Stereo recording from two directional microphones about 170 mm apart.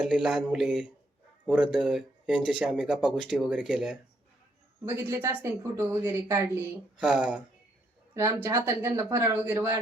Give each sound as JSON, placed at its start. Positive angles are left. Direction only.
{"t": 0.1, "sound": "speech", "side_deg": -5}
{"t": 4.9, "sound": "speech", "side_deg": -15}
{"t": 8.1, "sound": "speech", "side_deg": -15}